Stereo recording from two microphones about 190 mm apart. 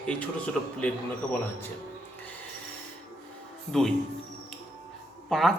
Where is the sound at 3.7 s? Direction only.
Centre (ahead or behind).